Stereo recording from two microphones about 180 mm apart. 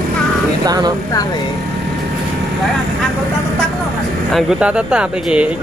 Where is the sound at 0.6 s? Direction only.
20° right (ahead or behind).